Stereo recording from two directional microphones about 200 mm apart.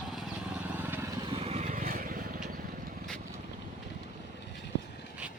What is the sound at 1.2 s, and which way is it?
Vehicle, 30° right (ahead or behind).